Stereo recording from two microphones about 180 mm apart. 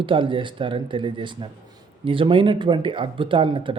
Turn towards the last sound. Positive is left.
turn(degrees=-30)  # may be behind; listen again after turning